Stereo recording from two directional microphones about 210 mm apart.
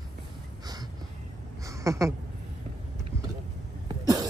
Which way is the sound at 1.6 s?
15° right (ahead or behind).